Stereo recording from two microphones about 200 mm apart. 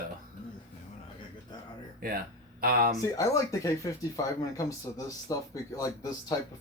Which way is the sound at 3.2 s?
15° left (ahead or behind).